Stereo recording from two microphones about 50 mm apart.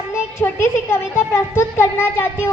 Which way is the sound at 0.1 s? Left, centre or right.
Left.